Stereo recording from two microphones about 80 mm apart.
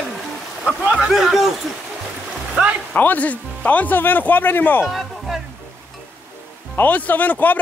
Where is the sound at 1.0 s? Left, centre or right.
Centre.